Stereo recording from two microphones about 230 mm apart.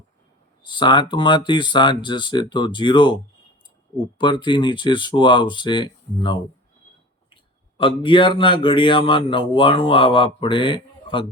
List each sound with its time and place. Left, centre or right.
0.6 s a man's voice: left
4.2 s a man's voice: centre
7.8 s a man's voice: left